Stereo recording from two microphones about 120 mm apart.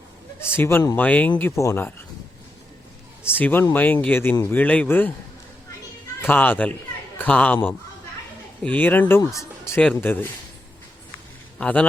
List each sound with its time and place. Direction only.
0.3 s speech: 20° left (ahead or behind)
3.2 s speech: 15° left (ahead or behind)
6.2 s speech: 15° left (ahead or behind)
9.8 s speech: 15° left (ahead or behind)
11.6 s speech: 10° left (ahead or behind)